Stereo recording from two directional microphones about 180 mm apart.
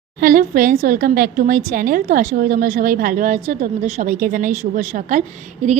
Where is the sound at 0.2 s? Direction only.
50° right (ahead or behind).